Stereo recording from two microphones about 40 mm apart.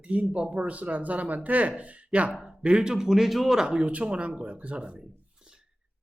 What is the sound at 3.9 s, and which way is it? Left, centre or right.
Speech, right.